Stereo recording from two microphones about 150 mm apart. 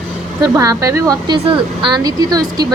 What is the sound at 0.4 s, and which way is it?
Speech, 25° right (ahead or behind).